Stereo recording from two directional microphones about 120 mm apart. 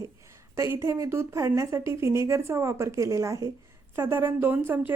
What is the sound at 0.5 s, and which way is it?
A woman's voice, 25° right (ahead or behind).